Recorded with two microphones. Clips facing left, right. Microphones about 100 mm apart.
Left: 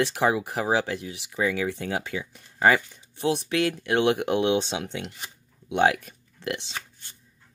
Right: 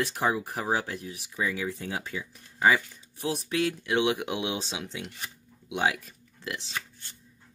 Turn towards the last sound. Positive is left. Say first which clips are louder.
# left 6 dB
turn(degrees=65)  # may be behind; listen again after turning